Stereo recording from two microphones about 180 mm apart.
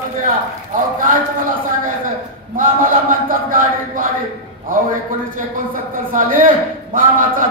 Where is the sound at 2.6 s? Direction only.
50° right (ahead or behind).